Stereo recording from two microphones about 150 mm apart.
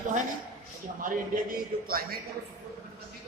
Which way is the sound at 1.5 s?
80° right.